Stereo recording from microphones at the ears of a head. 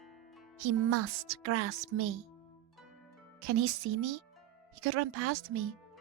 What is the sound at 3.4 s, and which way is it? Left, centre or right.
Speech, right.